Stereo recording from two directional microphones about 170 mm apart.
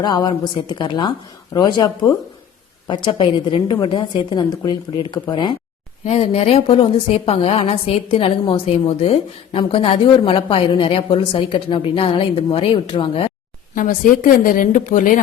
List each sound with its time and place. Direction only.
0.0 s a woman's voice: 25° left (ahead or behind)
6.1 s a woman's voice: 40° left (ahead or behind)
13.7 s speech: 50° left (ahead or behind)